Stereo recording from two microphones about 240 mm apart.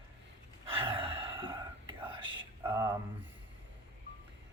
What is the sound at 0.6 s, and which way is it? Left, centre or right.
Gasp, right.